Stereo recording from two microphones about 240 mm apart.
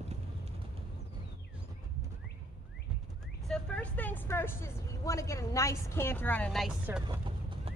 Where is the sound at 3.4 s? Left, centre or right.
Centre.